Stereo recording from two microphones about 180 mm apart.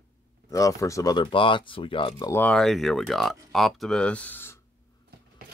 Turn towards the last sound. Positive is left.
turn(degrees=10)  # may be behind; listen again after turning